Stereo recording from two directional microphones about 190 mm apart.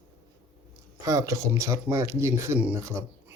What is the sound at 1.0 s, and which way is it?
Speech, 15° right (ahead or behind).